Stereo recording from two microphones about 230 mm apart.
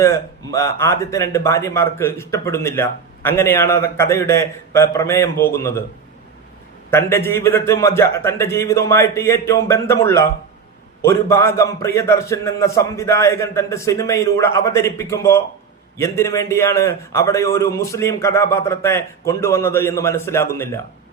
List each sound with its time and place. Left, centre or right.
0.0 s speech: centre
6.9 s speech: centre